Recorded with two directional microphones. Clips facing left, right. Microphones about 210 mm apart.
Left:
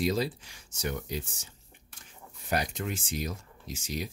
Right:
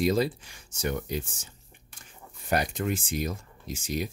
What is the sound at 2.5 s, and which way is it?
Speech, 55° right (ahead or behind).